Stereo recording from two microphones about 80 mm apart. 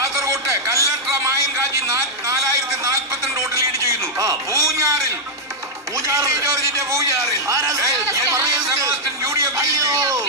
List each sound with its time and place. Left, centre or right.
0.0 s a sound: right
2.8 s music: right
6.1 s a man's voice: right